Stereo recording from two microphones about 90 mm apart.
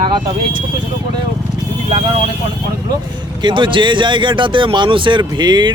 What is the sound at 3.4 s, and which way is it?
Speech, 65° right (ahead or behind).